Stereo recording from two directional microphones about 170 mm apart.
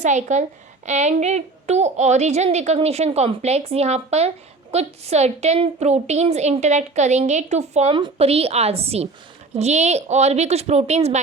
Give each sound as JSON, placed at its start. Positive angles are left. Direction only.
{"t": 0.0, "sound": "a woman's voice", "side_deg": -45}